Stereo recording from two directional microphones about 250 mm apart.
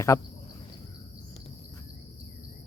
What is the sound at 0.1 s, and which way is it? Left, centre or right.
Speech, centre.